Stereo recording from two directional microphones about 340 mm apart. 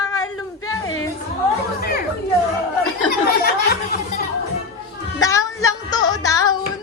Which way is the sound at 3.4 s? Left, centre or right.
Left.